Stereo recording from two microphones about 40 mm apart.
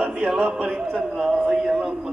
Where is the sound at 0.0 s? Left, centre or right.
Right.